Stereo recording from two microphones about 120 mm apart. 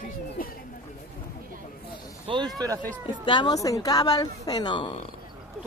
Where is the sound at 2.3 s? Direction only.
50° right (ahead or behind).